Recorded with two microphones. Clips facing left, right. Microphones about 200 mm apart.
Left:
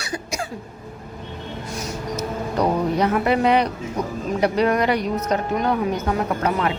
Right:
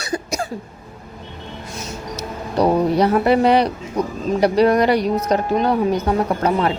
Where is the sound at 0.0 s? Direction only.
40° right (ahead or behind).